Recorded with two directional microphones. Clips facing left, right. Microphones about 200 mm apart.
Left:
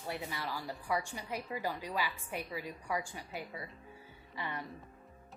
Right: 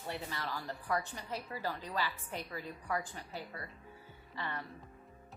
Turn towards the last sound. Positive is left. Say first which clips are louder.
# left 1 dB
turn(degrees=15)  # may be behind; listen again after turning